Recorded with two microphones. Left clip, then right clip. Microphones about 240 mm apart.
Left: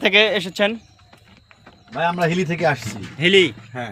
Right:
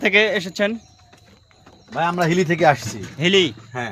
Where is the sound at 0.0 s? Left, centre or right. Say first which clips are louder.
Left 1 dB; centre.